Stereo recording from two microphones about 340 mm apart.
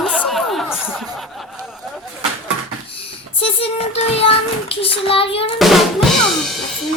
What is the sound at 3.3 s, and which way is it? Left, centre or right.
Music, centre.